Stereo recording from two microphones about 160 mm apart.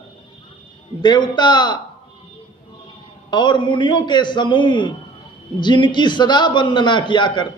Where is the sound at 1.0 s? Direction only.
30° left (ahead or behind).